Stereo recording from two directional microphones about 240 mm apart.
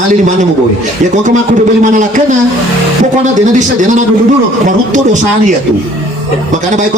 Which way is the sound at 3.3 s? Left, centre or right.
Right.